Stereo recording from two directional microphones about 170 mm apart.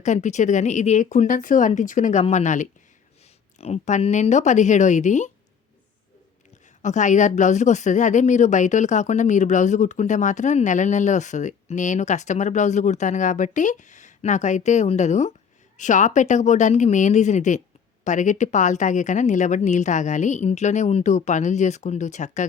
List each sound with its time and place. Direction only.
0.0 s speech: 45° left (ahead or behind)
6.8 s speech: 45° left (ahead or behind)